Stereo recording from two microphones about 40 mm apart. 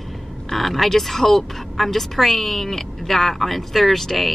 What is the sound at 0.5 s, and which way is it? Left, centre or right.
A woman's voice, centre.